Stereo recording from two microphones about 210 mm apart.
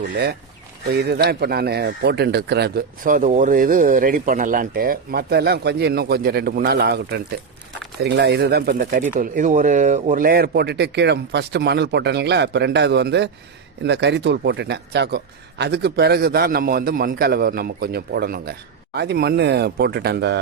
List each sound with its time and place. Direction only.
0.1 s speech: 50° right (ahead or behind)